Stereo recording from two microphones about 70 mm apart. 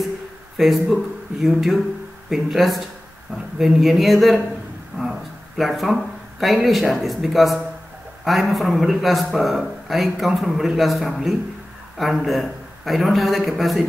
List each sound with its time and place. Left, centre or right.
0.6 s a man's voice: centre
4.9 s speech: right
5.6 s a man's voice: centre